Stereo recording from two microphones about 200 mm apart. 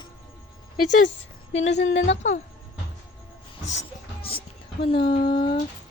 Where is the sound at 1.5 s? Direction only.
65° left (ahead or behind).